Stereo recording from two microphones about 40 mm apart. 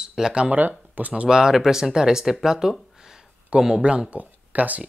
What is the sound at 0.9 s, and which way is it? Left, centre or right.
Speech, right.